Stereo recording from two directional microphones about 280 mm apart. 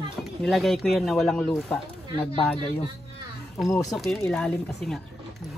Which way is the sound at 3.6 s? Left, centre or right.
Centre.